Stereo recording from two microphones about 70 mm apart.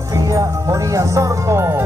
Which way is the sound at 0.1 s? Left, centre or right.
Right.